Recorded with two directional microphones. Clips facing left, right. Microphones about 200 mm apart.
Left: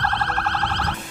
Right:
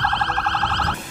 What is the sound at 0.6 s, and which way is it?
Car alarm, 15° left (ahead or behind).